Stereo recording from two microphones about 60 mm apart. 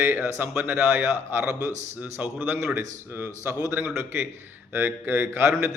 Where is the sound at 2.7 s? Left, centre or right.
Right.